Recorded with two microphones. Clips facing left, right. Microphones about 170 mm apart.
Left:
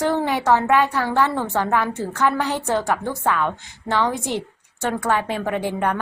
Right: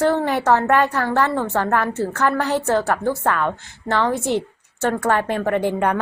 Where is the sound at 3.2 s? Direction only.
5° left (ahead or behind).